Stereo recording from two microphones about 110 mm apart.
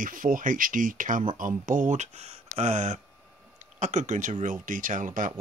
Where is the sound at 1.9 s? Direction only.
90° right.